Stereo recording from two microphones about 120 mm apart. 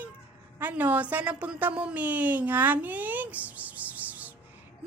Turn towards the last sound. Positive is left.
turn(degrees=-15)  # may be behind; listen again after turning